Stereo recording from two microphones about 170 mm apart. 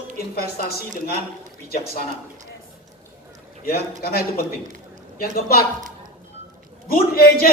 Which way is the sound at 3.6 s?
60° left (ahead or behind).